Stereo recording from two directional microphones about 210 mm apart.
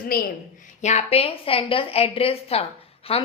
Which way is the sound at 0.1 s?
45° left (ahead or behind).